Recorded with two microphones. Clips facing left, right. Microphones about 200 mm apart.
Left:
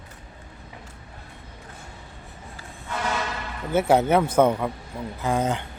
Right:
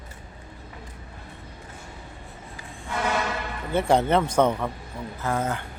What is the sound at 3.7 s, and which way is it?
Speech, 5° left (ahead or behind).